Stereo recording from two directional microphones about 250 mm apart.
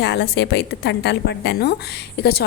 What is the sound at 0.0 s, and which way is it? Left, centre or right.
A woman's voice, left.